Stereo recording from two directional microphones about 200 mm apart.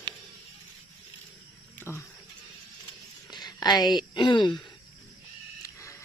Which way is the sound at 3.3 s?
20° left (ahead or behind).